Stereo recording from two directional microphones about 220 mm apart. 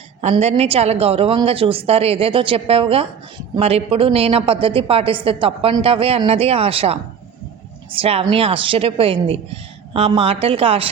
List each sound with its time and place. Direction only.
0.2 s a woman's voice: 30° right (ahead or behind)